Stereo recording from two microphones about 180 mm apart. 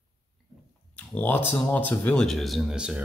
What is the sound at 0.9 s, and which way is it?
Speech, 10° left (ahead or behind).